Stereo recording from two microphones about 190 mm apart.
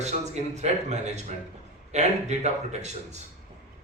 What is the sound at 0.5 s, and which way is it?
A man's voice, 35° right (ahead or behind).